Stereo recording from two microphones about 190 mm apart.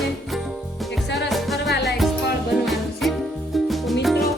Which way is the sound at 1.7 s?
60° left (ahead or behind).